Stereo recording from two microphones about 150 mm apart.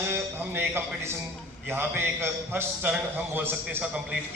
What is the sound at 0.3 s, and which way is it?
A man's voice, 15° right (ahead or behind).